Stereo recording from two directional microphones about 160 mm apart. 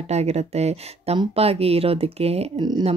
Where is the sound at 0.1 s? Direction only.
45° right (ahead or behind).